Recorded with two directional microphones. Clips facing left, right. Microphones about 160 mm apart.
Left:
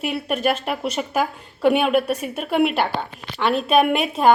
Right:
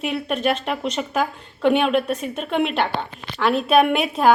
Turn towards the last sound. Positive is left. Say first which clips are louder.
# even
turn(degrees=0)  # may be behind; listen again after turning